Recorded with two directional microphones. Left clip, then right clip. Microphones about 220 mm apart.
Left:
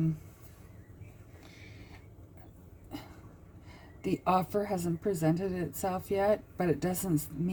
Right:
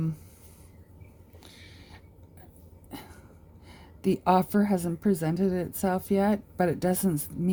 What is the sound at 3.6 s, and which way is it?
A woman's voice, 50° right (ahead or behind).